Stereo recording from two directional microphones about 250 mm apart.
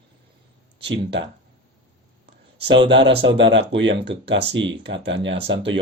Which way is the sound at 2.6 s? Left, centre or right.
Right.